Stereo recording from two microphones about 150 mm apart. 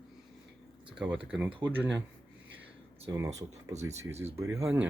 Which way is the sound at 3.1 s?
20° right (ahead or behind).